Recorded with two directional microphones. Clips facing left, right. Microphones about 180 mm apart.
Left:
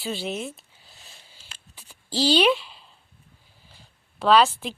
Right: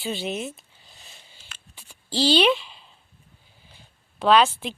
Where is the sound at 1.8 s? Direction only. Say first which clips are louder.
Right 1 dB; 10° left (ahead or behind).